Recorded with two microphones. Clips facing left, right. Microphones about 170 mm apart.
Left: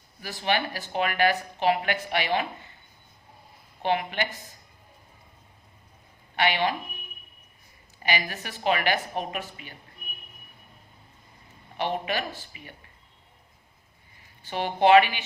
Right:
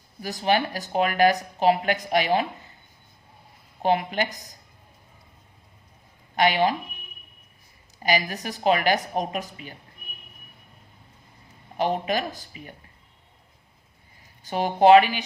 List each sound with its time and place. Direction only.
0.2 s speech: 40° right (ahead or behind)
3.8 s speech: 40° right (ahead or behind)
6.3 s speech: 40° right (ahead or behind)
7.9 s speech: 40° right (ahead or behind)
11.8 s speech: 40° right (ahead or behind)
14.4 s speech: 40° right (ahead or behind)